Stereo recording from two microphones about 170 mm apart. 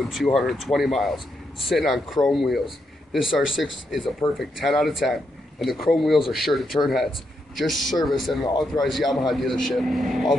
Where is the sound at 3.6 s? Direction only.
Centre (ahead or behind).